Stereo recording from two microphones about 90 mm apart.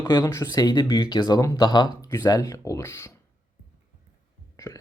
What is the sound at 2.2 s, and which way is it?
Speech, 40° left (ahead or behind).